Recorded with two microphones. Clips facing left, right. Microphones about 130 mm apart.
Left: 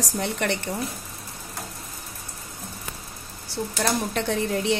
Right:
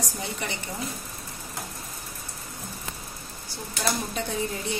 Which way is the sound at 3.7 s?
75° left (ahead or behind).